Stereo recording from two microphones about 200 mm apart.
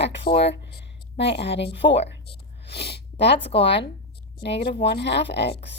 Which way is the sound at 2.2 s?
55° left (ahead or behind).